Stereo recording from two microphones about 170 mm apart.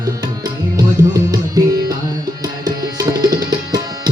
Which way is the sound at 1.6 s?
20° right (ahead or behind).